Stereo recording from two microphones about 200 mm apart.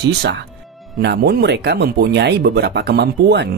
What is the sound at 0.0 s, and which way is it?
Speech, 60° right (ahead or behind).